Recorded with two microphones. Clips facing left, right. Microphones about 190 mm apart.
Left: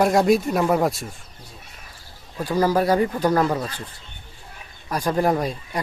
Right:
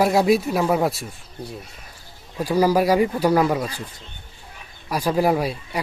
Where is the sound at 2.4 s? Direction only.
10° right (ahead or behind).